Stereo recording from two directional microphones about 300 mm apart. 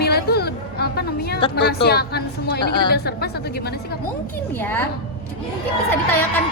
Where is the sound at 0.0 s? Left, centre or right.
Left.